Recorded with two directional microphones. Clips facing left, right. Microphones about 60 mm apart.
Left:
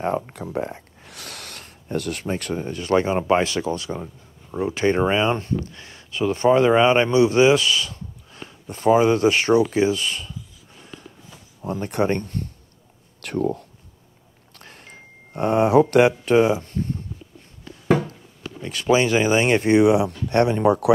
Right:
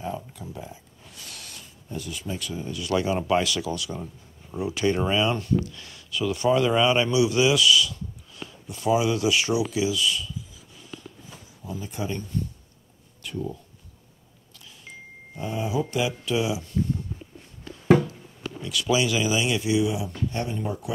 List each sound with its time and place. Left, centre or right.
0.0 s speech: left
11.6 s speech: left
14.5 s a sound: left
18.6 s speech: left